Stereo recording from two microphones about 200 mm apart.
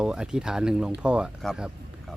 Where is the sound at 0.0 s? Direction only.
5° right (ahead or behind).